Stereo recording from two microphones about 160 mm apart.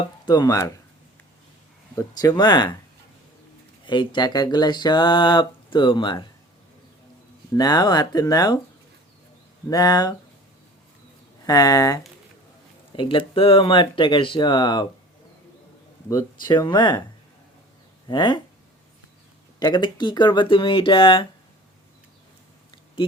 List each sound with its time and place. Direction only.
0.3 s speech: 25° left (ahead or behind)
2.0 s speech: 25° left (ahead or behind)
3.8 s speech: 30° left (ahead or behind)
7.5 s speech: 25° left (ahead or behind)
9.6 s speech: 25° left (ahead or behind)
11.4 s speech: 25° left (ahead or behind)
13.0 s speech: 30° left (ahead or behind)
16.0 s speech: 25° left (ahead or behind)
18.1 s speech: 30° left (ahead or behind)
19.5 s speech: 25° left (ahead or behind)